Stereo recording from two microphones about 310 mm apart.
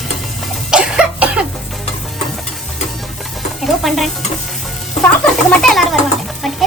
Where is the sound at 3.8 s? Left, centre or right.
Centre.